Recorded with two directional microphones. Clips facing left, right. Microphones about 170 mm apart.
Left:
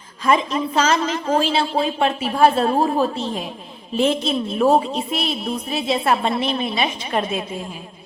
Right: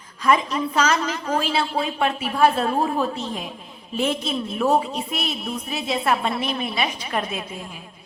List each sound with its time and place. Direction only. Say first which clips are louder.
0.3 s speech: left 2 dB; 25° left (ahead or behind)